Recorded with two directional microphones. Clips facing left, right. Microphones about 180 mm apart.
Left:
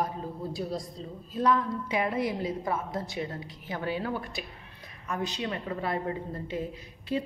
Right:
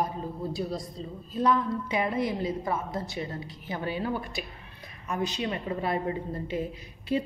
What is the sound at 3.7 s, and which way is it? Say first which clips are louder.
A woman's voice: right 1 dB; 5° right (ahead or behind).